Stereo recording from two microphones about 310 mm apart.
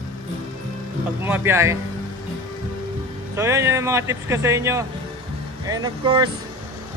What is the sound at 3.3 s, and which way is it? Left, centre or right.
Speech, centre.